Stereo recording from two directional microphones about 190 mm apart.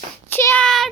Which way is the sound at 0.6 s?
Centre (ahead or behind).